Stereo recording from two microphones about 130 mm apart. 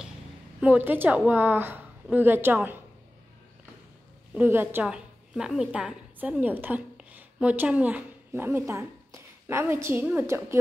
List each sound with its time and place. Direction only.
0.6 s a woman's voice: 10° right (ahead or behind)
4.3 s a woman's voice: 15° right (ahead or behind)
4.8 s a woman's voice: 5° right (ahead or behind); by 10.6 s 20° right (ahead or behind)